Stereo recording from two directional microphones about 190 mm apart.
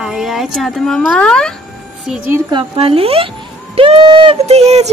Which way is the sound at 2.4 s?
25° right (ahead or behind).